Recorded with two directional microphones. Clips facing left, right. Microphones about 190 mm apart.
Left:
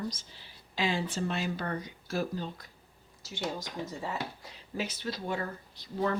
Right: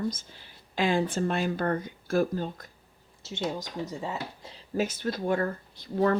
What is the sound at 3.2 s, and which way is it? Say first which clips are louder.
Speech: right 4 dB; 25° right (ahead or behind).